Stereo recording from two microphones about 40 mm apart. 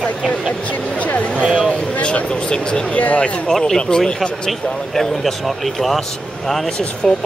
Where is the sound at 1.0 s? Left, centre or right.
Left.